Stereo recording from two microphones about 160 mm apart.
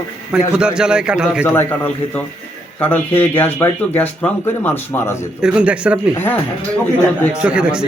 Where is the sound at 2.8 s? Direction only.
10° left (ahead or behind).